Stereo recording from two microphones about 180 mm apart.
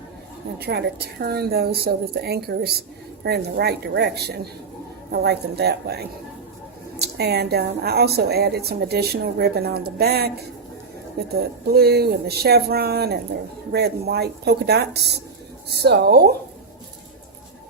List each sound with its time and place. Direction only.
0.6 s a woman's voice: 60° right (ahead or behind)
7.0 s a woman's voice: 65° right (ahead or behind)